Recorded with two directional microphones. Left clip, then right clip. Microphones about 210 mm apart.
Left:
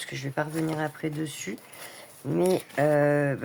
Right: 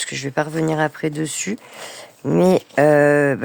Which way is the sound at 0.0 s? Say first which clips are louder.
Right 9 dB; 55° right (ahead or behind).